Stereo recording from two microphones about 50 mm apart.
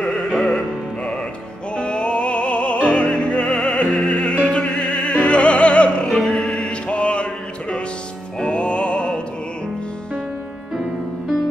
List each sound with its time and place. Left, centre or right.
0.3 s music: centre
1.8 s music: centre
4.6 s opera: centre
6.0 s music: centre
8.4 s music: left